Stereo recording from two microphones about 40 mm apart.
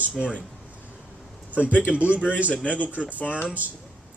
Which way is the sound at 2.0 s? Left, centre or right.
Right.